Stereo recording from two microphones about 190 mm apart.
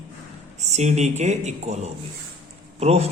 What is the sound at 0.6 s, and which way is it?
A man's voice, 35° right (ahead or behind).